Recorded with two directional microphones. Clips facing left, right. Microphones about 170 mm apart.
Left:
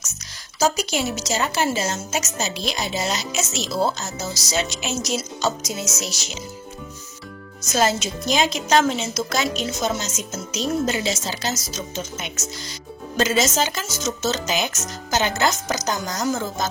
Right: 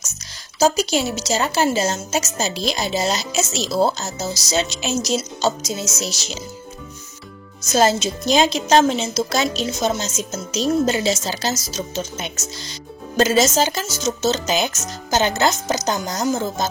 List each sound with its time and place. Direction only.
0.6 s a woman's voice: 30° right (ahead or behind)
7.7 s a woman's voice: 30° right (ahead or behind)